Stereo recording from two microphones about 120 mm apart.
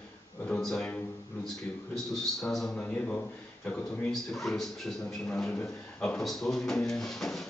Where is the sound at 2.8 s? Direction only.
15° left (ahead or behind).